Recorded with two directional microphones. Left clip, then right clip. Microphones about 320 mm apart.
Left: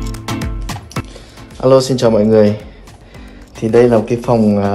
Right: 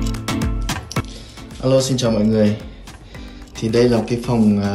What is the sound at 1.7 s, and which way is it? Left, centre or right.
Speech, centre.